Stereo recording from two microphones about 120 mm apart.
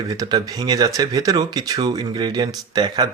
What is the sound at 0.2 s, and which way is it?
Speech, 30° right (ahead or behind).